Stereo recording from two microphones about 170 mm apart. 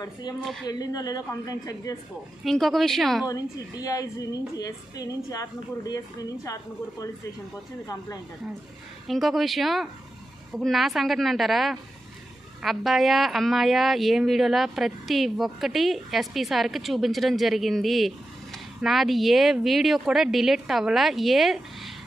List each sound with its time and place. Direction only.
0.0 s a woman's voice: 20° left (ahead or behind)
2.4 s a woman's voice: centre (ahead or behind)
3.3 s a woman's voice: 20° left (ahead or behind)
9.0 s a woman's voice: centre (ahead or behind)